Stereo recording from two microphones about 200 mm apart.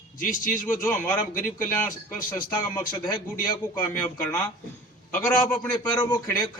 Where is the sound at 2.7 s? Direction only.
20° left (ahead or behind).